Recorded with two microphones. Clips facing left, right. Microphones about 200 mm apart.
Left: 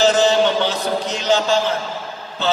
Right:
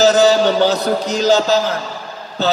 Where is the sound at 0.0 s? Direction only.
40° right (ahead or behind).